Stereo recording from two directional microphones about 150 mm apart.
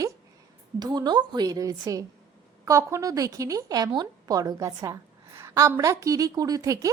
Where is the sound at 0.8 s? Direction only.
25° right (ahead or behind).